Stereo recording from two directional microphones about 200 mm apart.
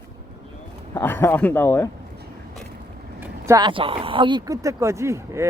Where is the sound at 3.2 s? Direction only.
15° right (ahead or behind).